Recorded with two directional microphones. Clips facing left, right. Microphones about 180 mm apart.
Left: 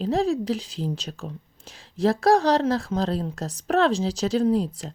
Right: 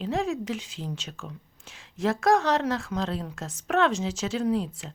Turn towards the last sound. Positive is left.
turn(degrees=35)  # may be behind; listen again after turning